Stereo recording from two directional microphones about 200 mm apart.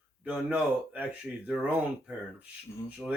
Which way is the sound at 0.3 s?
5° right (ahead or behind).